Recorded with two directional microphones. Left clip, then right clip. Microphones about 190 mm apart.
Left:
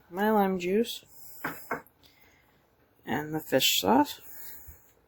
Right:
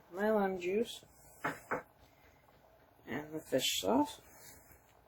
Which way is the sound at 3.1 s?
55° left (ahead or behind).